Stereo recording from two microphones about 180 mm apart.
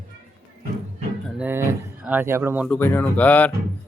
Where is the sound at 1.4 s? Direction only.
10° right (ahead or behind).